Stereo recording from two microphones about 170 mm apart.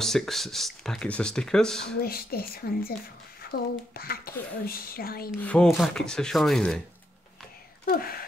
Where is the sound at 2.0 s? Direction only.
65° left (ahead or behind).